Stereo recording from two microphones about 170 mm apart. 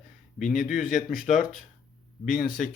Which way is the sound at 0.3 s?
Centre (ahead or behind).